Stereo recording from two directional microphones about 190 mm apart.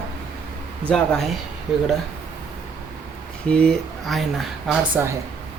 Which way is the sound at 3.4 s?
5° left (ahead or behind).